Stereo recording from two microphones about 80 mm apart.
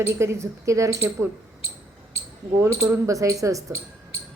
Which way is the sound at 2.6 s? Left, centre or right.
Right.